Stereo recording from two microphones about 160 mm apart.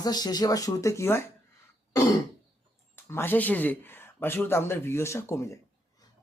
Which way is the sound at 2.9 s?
15° left (ahead or behind).